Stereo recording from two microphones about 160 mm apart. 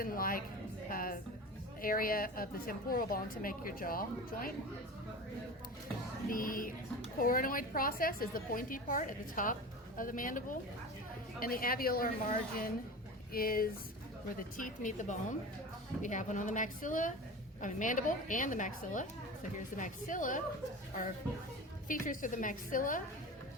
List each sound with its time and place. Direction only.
0.0 s a woman's voice: 65° left (ahead or behind)
0.9 s a sound: 60° left (ahead or behind)
1.8 s a woman's voice: 60° left (ahead or behind)
6.3 s a woman's voice: 60° left (ahead or behind)
14.5 s a woman's voice: 55° left (ahead or behind)
21.8 s a woman's voice: 55° left (ahead or behind)